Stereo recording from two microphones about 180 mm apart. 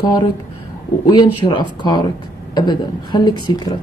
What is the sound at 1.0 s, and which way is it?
A woman's voice, 20° left (ahead or behind).